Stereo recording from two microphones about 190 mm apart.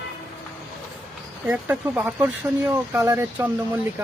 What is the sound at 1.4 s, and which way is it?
Speech, 10° right (ahead or behind).